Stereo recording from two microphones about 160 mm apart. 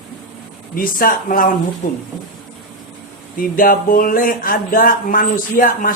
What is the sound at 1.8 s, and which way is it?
Speech, 50° left (ahead or behind).